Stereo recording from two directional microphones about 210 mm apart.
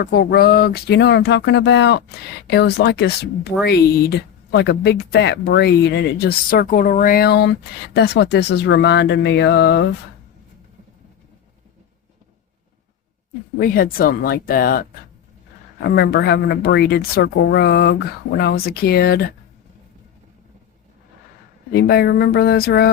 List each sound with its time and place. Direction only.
0.0 s speech: 45° left (ahead or behind)
13.6 s speech: 45° left (ahead or behind)
21.7 s speech: 50° left (ahead or behind)